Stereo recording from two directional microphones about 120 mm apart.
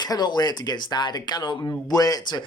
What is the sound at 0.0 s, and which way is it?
Speech, 35° left (ahead or behind).